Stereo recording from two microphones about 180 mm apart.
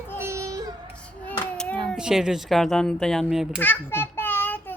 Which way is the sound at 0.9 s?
5° left (ahead or behind).